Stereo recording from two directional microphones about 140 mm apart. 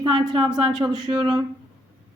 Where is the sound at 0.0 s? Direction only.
30° right (ahead or behind).